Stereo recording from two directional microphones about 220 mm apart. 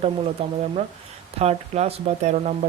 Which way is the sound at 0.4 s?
25° right (ahead or behind).